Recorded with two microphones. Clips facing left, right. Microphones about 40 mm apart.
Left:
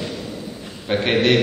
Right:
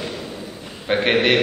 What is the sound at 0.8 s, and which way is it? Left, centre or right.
Speech, centre.